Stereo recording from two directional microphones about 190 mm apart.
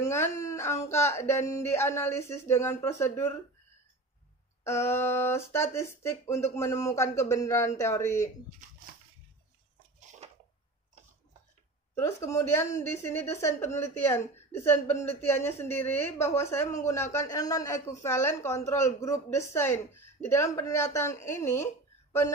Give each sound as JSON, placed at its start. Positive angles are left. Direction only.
{"t": 0.0, "sound": "a woman's voice", "side_deg": 15}
{"t": 4.6, "sound": "a woman's voice", "side_deg": 15}
{"t": 10.2, "sound": "a sound", "side_deg": -35}
{"t": 11.9, "sound": "a woman's voice", "side_deg": 15}